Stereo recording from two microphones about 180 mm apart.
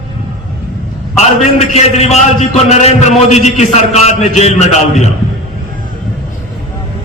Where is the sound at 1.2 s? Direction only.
35° left (ahead or behind).